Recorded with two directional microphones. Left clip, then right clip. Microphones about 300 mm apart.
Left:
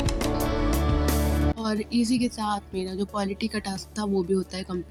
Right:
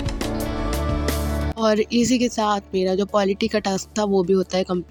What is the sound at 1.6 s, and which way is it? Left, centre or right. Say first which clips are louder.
Speech: right 9 dB; left.